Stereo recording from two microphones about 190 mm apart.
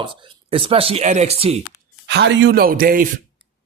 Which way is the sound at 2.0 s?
65° right (ahead or behind).